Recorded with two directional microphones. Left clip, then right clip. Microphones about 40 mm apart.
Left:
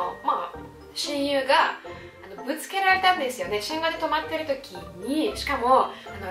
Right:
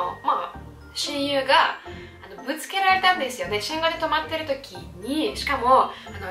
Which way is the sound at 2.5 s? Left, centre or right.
Left.